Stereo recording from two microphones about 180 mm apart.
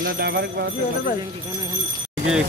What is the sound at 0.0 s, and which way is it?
Speech, 65° right (ahead or behind).